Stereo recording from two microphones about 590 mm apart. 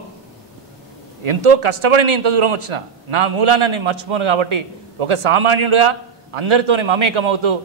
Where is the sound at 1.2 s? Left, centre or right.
Right.